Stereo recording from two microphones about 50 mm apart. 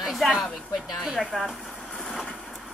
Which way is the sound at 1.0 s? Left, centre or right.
Centre.